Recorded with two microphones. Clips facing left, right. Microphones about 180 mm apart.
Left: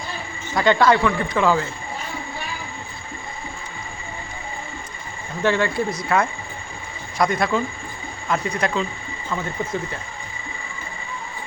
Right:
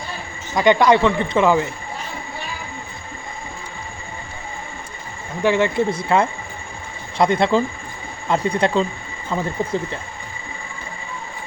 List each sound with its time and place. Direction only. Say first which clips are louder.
0.5 s speech: right 3 dB; 20° right (ahead or behind)
5.4 s speech: right 3 dB; 15° right (ahead or behind); by 9.5 s 30° right (ahead or behind)